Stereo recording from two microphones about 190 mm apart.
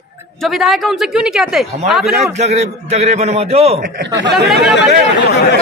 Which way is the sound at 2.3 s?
35° right (ahead or behind).